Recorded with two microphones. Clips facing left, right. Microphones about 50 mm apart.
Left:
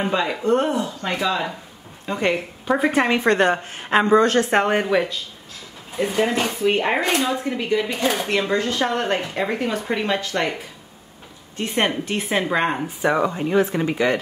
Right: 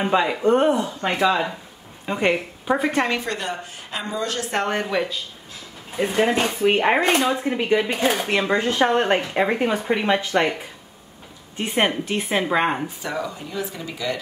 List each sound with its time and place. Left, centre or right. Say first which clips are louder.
0.1 s a woman's voice: right 4 dB; centre
2.9 s a woman's voice: left 3 dB; centre
3.2 s a woman's voice: left 10 dB; left
4.8 s a woman's voice: left 4 dB; centre
5.9 s speech: right 1 dB; centre
7.0 s speech: right 2 dB; right
11.5 s speech: even; centre
11.8 s a woman's voice: right 1 dB; centre
13.0 s speech: left 8 dB; left